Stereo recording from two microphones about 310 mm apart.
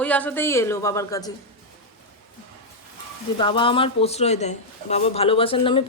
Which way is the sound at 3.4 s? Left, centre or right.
Centre.